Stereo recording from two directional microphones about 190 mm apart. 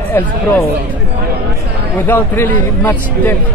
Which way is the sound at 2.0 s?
10° left (ahead or behind).